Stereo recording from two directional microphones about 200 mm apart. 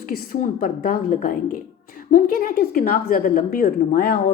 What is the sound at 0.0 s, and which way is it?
A woman's voice, 40° left (ahead or behind).